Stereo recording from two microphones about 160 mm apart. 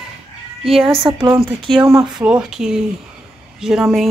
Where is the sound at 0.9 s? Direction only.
35° right (ahead or behind).